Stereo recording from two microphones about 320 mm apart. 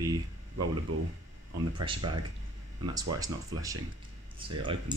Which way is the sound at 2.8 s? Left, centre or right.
Centre.